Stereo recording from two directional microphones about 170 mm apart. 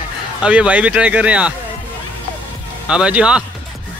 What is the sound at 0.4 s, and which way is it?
Speech, 5° right (ahead or behind).